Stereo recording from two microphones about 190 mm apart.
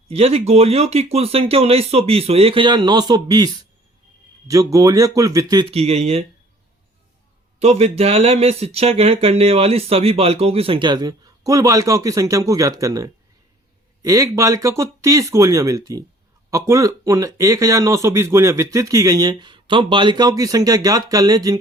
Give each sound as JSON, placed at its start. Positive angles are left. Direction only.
{"t": 0.1, "sound": "speech", "side_deg": -30}
{"t": 4.7, "sound": "speech", "side_deg": -20}
{"t": 7.6, "sound": "speech", "side_deg": -35}